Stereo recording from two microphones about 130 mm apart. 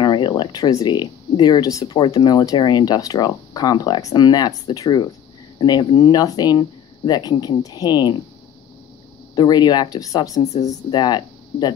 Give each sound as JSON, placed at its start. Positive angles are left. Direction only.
{"t": 0.0, "sound": "speech", "side_deg": 35}
{"t": 9.3, "sound": "a woman's voice", "side_deg": 35}
{"t": 10.4, "sound": "speech", "side_deg": 60}
{"t": 10.7, "sound": "speech", "side_deg": 30}